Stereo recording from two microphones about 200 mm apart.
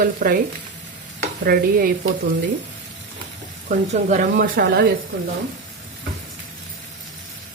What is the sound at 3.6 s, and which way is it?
Speech, 40° right (ahead or behind).